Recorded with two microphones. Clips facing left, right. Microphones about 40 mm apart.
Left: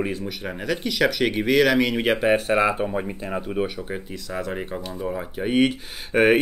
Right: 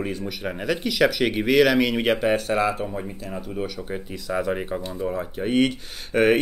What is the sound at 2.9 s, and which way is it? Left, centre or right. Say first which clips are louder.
Speech: left 4 dB; left.